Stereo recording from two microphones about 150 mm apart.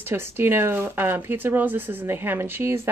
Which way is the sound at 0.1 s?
15° right (ahead or behind).